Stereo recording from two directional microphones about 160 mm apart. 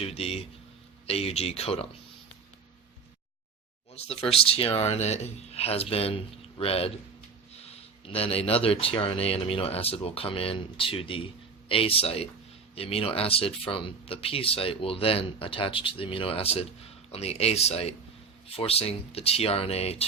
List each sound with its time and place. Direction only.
0.0 s speech: 40° left (ahead or behind)
3.9 s speech: 40° left (ahead or behind)
8.0 s speech: 35° left (ahead or behind)